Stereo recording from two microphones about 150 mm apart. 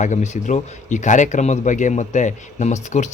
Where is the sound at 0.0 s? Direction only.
55° left (ahead or behind).